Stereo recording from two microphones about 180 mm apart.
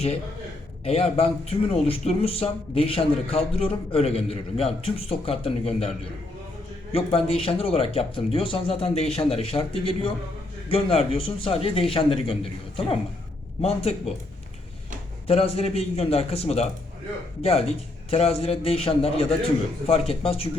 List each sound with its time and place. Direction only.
0.9 s a man's voice: 35° left (ahead or behind)
6.9 s a man's voice: 30° left (ahead or behind)
15.3 s a man's voice: 35° left (ahead or behind)
18.1 s a man's voice: 35° left (ahead or behind)